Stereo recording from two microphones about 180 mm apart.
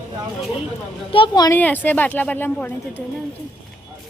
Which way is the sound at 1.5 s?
10° left (ahead or behind).